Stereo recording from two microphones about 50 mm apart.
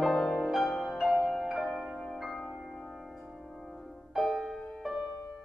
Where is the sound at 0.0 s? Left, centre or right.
Centre.